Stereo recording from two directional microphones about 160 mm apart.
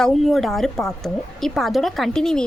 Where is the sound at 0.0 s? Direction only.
Centre (ahead or behind).